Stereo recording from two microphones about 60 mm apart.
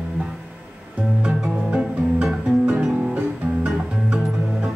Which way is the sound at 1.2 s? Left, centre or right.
Centre.